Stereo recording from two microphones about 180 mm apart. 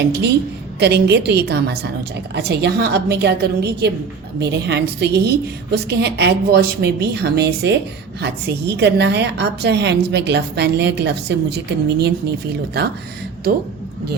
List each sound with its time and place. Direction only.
0.0 s a woman's voice: 65° right (ahead or behind)